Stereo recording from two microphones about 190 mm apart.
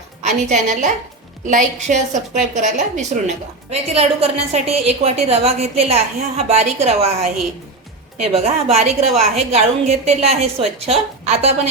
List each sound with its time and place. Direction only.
0.2 s a woman's voice: 40° right (ahead or behind)